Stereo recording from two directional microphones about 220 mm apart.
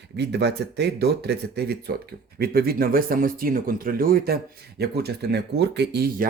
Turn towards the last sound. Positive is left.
turn(degrees=-45)  # may be behind; listen again after turning